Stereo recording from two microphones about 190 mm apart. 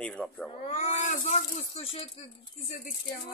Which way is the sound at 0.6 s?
40° left (ahead or behind).